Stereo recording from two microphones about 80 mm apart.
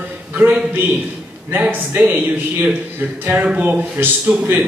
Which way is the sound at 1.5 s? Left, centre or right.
Right.